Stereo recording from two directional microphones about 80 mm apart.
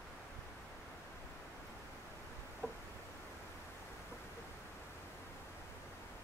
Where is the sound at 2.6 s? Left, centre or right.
Centre.